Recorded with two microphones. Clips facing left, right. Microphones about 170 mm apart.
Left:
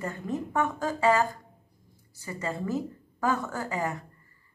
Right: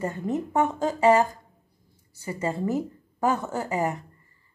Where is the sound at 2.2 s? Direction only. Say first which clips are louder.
Right 5 dB; 20° right (ahead or behind).